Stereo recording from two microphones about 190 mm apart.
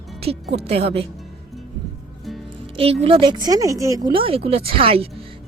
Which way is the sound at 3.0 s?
25° right (ahead or behind).